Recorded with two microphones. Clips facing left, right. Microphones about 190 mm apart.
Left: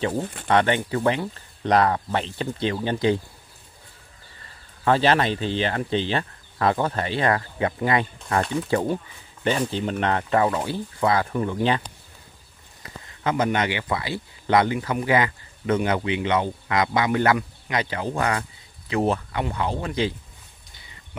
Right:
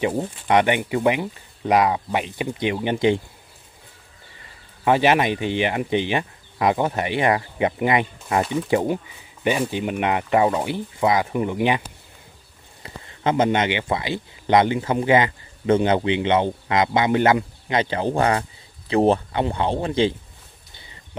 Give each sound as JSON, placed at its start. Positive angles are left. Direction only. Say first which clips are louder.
{"t": 0.5, "sound": "speech", "louder": "right 2 dB", "side_deg": -15}
{"t": 4.8, "sound": "speech", "louder": "right 2 dB", "side_deg": -15}
{"t": 8.4, "sound": "speech", "louder": "right 2 dB", "side_deg": -5}
{"t": 12.8, "sound": "speech", "louder": "right 3 dB", "side_deg": -25}